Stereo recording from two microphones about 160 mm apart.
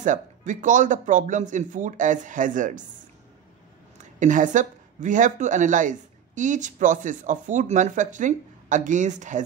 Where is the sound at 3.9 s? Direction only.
50° right (ahead or behind).